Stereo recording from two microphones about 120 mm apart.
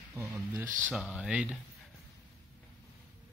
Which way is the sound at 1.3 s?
10° right (ahead or behind).